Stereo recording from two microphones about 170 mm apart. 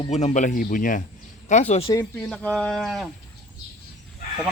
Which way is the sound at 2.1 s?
5° left (ahead or behind).